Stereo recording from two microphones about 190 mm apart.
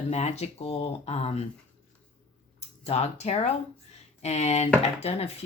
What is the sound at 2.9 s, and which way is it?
Speech, 35° left (ahead or behind).